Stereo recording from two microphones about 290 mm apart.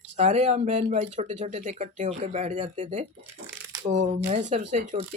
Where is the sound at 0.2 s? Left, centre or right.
Right.